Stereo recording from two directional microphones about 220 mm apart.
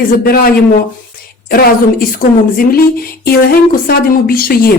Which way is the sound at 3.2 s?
45° left (ahead or behind).